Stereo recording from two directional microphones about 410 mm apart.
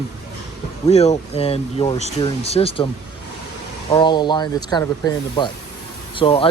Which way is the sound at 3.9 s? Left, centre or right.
Centre.